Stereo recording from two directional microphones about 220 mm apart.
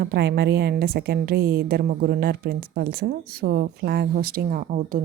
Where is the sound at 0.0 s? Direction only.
45° right (ahead or behind).